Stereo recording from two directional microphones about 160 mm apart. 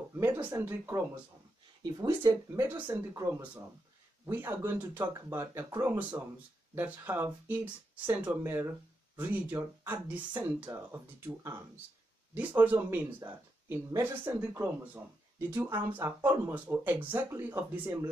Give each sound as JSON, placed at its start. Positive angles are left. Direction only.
{"t": 0.1, "sound": "speech", "side_deg": -15}
{"t": 12.4, "sound": "speech", "side_deg": -10}